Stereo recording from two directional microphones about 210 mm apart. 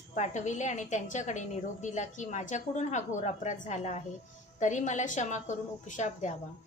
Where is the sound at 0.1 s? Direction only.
35° left (ahead or behind).